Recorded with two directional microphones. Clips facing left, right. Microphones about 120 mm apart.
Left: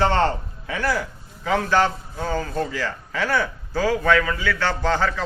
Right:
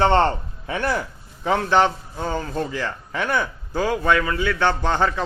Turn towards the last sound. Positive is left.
turn(degrees=-20)  # may be behind; listen again after turning